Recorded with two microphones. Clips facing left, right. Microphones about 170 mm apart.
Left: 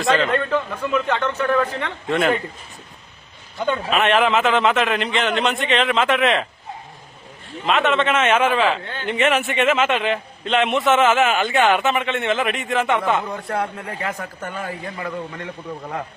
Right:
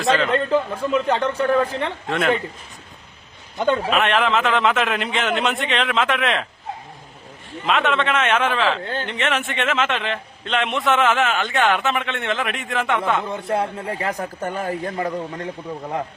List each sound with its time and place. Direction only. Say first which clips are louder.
0.0 s a man's voice: left 1 dB; centre (ahead or behind)
0.3 s a man's voice: right 2 dB; 30° right (ahead or behind)
2.0 s a man's voice: left 2 dB; centre (ahead or behind)
3.9 s a man's voice: left 2 dB; centre (ahead or behind)
7.6 s a man's voice: left 2 dB; centre (ahead or behind)
13.2 s a man's voice: right 2 dB; 25° right (ahead or behind); by 15.4 s 45° right (ahead or behind)